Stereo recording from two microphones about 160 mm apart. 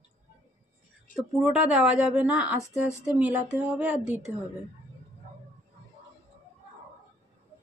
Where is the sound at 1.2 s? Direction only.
5° right (ahead or behind).